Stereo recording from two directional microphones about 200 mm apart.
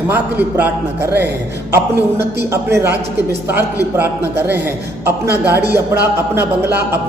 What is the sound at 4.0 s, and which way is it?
Speech, 10° right (ahead or behind).